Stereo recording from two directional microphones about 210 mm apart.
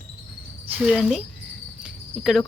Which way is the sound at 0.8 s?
Centre (ahead or behind).